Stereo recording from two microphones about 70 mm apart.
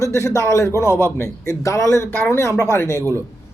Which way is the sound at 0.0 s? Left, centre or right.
Left.